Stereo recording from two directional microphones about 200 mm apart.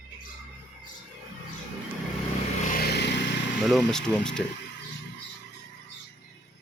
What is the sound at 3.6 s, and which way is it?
Speech, centre (ahead or behind).